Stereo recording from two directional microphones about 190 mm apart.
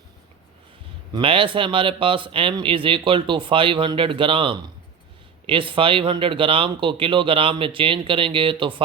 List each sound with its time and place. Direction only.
1.1 s a man's voice: 25° right (ahead or behind)